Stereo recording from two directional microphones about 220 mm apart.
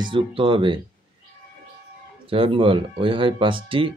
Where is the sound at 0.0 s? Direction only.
25° right (ahead or behind).